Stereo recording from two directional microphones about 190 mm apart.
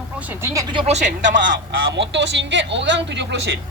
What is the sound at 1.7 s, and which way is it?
Speech, 65° right (ahead or behind).